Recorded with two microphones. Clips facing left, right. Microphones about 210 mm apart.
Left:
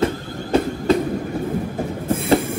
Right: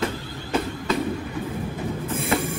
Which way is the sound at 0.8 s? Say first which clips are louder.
Left 6 dB; 45° left (ahead or behind).